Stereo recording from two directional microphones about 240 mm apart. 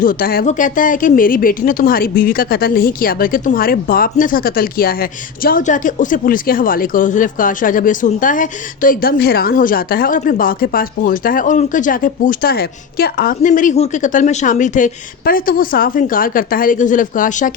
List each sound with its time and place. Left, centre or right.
0.0 s speech: left